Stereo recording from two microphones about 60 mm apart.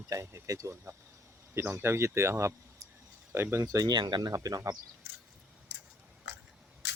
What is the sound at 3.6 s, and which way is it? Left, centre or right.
Speech, right.